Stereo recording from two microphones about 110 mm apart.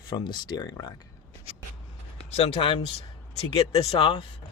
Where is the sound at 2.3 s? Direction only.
60° left (ahead or behind).